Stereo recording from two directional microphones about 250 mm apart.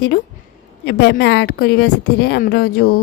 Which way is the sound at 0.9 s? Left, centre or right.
Left.